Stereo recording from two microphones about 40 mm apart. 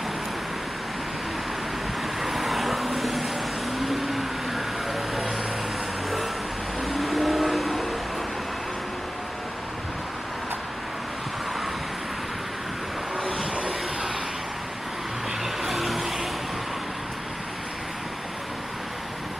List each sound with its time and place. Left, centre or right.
2.2 s vehicle: centre
6.8 s train: centre
13.2 s vehicle: right
15.4 s vehicle: centre